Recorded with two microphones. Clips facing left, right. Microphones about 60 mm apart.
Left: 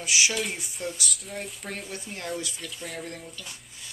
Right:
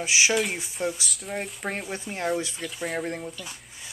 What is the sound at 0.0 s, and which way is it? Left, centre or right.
Speech, right.